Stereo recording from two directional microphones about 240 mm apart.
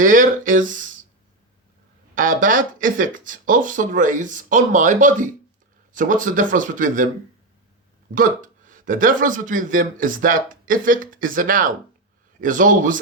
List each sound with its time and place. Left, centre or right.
0.0 s speech: right
2.1 s speech: right
8.1 s speech: right